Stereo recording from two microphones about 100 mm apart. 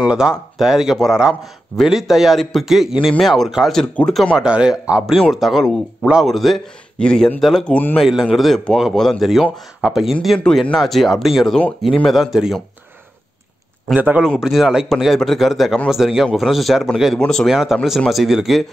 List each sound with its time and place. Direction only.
0.0 s a man's voice: 10° right (ahead or behind); by 4.3 s 5° left (ahead or behind)
4.4 s a man's voice: 10° right (ahead or behind)
7.6 s speech: 10° left (ahead or behind)
8.0 s a man's voice: 5° right (ahead or behind)
12.2 s a man's voice: 5° right (ahead or behind)
13.9 s speech: 15° right (ahead or behind)
14.4 s a man's voice: 5° right (ahead or behind)